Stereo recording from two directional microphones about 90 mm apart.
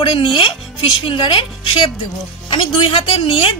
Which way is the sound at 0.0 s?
80° left.